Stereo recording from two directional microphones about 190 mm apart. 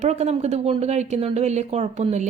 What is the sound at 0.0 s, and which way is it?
Speech, 35° right (ahead or behind).